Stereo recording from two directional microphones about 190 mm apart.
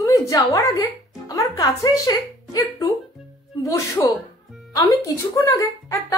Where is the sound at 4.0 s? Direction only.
15° left (ahead or behind).